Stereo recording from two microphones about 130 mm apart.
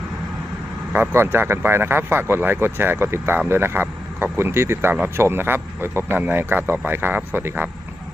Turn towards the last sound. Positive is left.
turn(degrees=-15)  # may be behind; listen again after turning